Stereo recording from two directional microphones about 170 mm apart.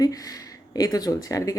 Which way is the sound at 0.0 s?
20° left (ahead or behind).